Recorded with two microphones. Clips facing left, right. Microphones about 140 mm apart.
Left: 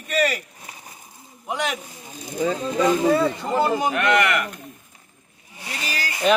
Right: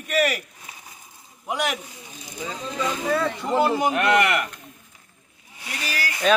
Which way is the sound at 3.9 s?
35° right (ahead or behind).